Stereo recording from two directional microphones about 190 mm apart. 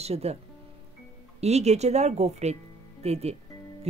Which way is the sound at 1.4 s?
35° right (ahead or behind).